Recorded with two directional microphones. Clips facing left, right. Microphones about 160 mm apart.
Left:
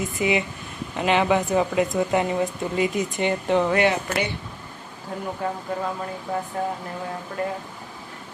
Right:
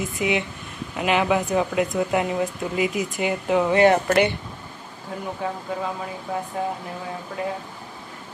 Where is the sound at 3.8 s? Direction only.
55° right (ahead or behind).